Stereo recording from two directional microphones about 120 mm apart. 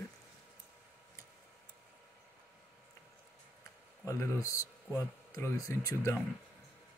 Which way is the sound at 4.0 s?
25° left (ahead or behind).